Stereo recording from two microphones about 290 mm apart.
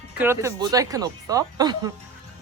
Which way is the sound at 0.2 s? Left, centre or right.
Centre.